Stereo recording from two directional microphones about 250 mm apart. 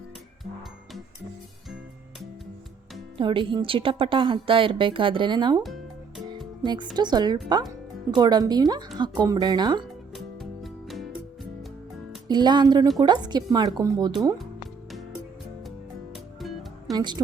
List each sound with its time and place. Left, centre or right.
3.2 s a woman's voice: centre
10.2 s music: centre
12.3 s speech: centre
16.1 s music: centre
16.9 s a woman's voice: centre